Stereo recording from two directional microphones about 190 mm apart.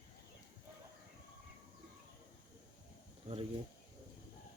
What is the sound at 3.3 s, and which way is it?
Speech, 35° right (ahead or behind).